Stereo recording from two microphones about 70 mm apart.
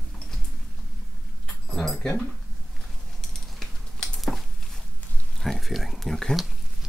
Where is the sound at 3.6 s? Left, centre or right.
Centre.